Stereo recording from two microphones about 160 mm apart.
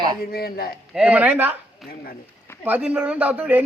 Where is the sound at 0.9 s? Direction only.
10° right (ahead or behind).